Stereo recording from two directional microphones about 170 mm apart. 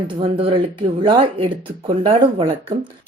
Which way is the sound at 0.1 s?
30° right (ahead or behind).